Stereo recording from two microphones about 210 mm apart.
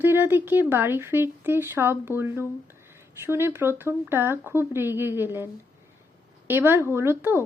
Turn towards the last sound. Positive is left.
turn(degrees=-10)  # may be behind; listen again after turning